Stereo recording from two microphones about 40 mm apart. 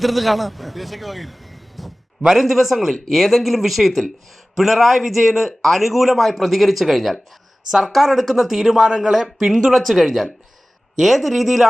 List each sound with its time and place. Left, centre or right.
0.0 s a man's voice: centre